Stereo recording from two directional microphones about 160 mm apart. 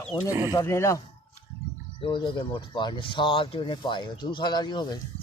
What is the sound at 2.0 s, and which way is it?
Speech, 30° left (ahead or behind).